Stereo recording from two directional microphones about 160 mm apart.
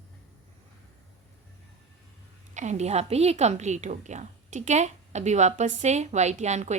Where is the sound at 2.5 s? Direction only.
45° right (ahead or behind).